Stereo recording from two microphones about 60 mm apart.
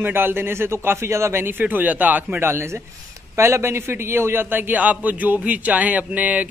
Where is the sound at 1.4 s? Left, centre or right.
Right.